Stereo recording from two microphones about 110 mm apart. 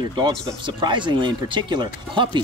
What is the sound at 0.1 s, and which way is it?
Speech, 45° right (ahead or behind).